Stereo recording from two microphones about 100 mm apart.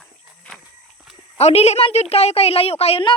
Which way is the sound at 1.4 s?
90° left.